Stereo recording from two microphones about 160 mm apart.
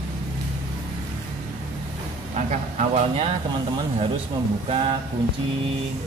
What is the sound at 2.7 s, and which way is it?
Speech, 40° right (ahead or behind).